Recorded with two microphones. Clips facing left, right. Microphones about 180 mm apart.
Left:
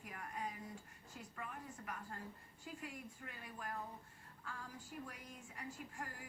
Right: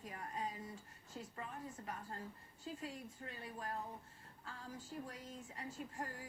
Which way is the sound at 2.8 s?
30° right (ahead or behind).